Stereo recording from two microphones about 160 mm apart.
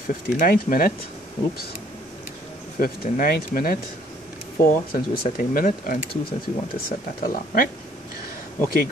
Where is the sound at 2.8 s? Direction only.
65° left (ahead or behind).